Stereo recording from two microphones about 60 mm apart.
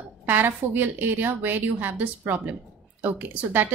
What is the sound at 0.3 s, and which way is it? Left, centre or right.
A woman's voice, right.